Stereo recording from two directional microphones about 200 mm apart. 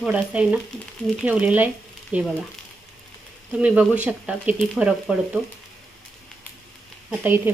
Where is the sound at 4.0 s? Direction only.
5° right (ahead or behind).